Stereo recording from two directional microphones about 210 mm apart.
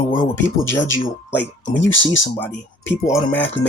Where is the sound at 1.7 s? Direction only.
60° left (ahead or behind).